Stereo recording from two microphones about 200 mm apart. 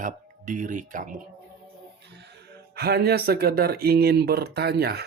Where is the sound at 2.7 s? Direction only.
50° right (ahead or behind).